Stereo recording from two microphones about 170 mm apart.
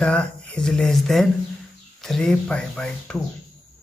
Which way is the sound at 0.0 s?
5° left (ahead or behind).